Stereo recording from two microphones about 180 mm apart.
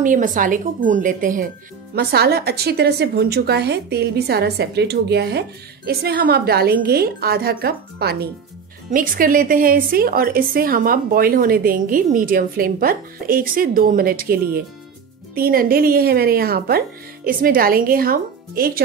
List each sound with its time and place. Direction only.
0.0 s a woman's voice: 45° right (ahead or behind)
2.0 s a woman's voice: 60° right (ahead or behind)
8.9 s a woman's voice: 50° right (ahead or behind)